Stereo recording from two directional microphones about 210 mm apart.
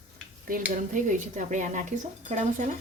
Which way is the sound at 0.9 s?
35° right (ahead or behind).